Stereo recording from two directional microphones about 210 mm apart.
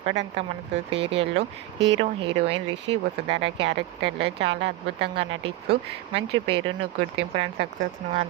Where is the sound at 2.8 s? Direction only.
55° right (ahead or behind).